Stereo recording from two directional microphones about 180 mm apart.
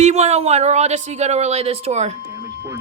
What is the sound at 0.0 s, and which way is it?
Speech, 40° right (ahead or behind).